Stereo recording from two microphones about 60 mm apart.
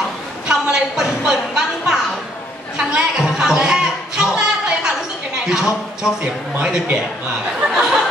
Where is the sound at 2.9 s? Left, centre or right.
Centre.